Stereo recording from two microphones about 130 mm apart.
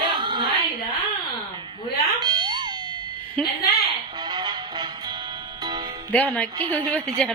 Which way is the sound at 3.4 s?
5° left (ahead or behind).